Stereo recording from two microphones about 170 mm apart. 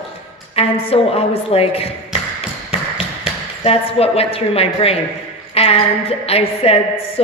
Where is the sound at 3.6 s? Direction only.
35° left (ahead or behind).